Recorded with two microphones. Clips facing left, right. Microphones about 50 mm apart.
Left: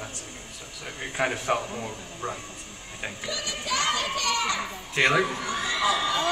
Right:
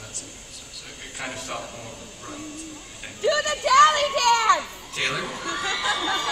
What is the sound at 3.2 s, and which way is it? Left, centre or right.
Speech, right.